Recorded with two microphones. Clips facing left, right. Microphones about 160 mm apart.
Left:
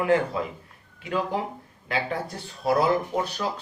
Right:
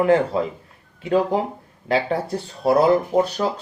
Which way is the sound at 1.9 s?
35° right (ahead or behind).